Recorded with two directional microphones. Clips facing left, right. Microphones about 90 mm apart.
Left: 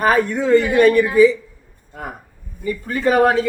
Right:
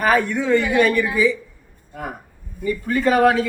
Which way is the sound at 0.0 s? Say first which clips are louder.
Left 2 dB; 35° left (ahead or behind).